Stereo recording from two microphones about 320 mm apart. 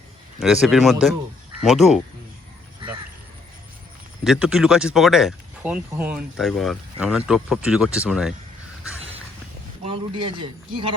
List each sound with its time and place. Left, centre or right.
0.3 s speech: centre
4.2 s speech: centre
9.8 s speech: centre